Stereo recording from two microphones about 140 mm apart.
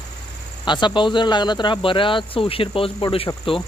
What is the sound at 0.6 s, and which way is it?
Speech, 35° left (ahead or behind).